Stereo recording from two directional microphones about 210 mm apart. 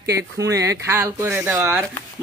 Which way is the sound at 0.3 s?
55° right (ahead or behind).